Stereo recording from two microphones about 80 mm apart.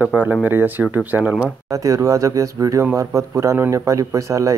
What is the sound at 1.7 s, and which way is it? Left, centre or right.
Speech, right.